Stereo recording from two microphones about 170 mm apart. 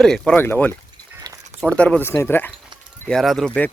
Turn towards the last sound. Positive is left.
turn(degrees=5)  # may be behind; listen again after turning